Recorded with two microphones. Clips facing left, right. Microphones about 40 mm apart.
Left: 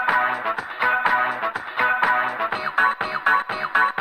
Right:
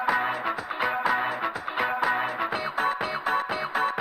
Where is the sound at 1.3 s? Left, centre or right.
Left.